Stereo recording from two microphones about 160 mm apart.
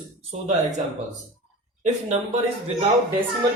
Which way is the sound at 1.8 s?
45° right (ahead or behind).